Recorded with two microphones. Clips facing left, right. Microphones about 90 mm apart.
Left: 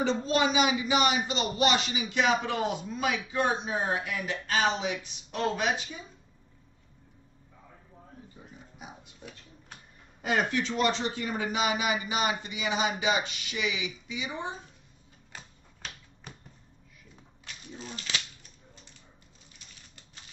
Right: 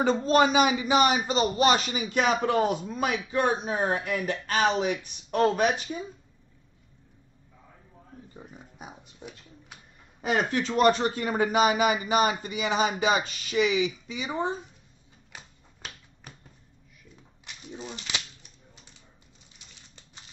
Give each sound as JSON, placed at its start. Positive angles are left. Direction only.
{"t": 0.0, "sound": "speech", "side_deg": -45}
{"t": 8.7, "sound": "a sound", "side_deg": -35}
{"t": 10.3, "sound": "speech", "side_deg": -40}
{"t": 10.7, "sound": "speech", "side_deg": -50}
{"t": 15.3, "sound": "typewriter", "side_deg": -5}
{"t": 17.7, "sound": "speech", "side_deg": -20}